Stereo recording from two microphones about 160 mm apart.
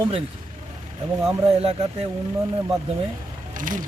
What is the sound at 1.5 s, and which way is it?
Speech, 40° right (ahead or behind).